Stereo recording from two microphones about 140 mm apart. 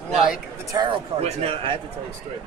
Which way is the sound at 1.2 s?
50° right (ahead or behind).